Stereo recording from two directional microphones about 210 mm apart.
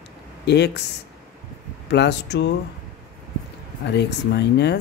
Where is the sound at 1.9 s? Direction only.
55° left (ahead or behind).